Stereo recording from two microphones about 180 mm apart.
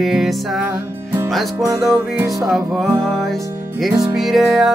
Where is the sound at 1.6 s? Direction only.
15° right (ahead or behind).